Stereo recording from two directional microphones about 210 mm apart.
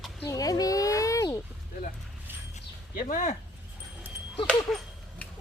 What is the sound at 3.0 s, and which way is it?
Speech, 35° left (ahead or behind).